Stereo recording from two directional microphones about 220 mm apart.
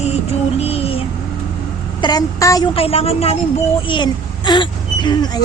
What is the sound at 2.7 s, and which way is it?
Speech, 25° left (ahead or behind).